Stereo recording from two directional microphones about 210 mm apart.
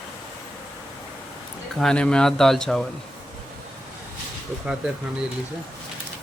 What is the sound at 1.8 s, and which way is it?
Speech, 5° left (ahead or behind).